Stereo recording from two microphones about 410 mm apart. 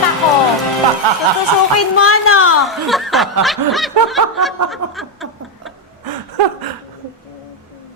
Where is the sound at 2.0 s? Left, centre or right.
Left.